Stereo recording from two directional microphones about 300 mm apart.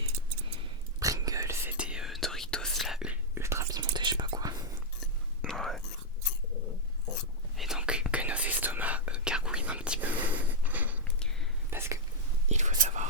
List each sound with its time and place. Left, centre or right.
0.9 s whispering: centre
5.4 s whispering: centre
7.5 s whispering: centre
10.6 s a sound: centre
11.7 s whispering: centre
12.5 s whispering: right